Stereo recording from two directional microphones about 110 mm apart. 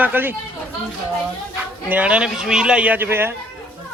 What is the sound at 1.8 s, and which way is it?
A man's voice, 10° right (ahead or behind).